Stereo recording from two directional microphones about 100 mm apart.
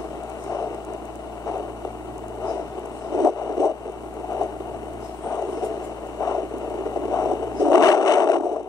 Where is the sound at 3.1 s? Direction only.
35° left (ahead or behind).